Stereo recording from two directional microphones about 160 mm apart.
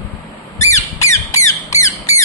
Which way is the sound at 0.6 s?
20° left (ahead or behind).